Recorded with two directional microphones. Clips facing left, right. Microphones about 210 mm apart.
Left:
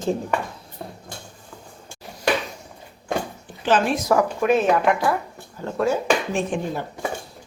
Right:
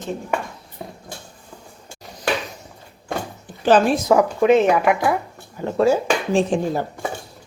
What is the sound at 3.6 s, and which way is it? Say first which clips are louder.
Speech: right 5 dB; 35° right (ahead or behind).